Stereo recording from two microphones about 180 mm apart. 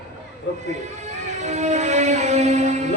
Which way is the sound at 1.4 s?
40° right (ahead or behind).